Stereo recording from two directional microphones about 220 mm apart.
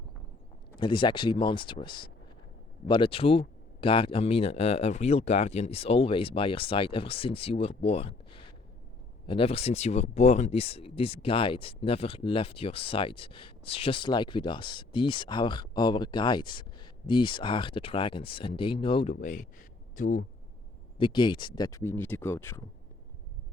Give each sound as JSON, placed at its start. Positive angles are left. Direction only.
{"t": 0.8, "sound": "speech", "side_deg": 20}
{"t": 19.1, "sound": "speech", "side_deg": 35}
{"t": 21.0, "sound": "speech", "side_deg": 20}